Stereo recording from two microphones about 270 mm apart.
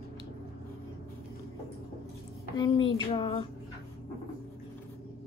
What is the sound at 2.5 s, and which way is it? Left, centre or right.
Speech, centre.